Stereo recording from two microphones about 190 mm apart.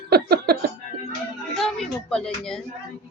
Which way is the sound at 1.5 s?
Centre (ahead or behind).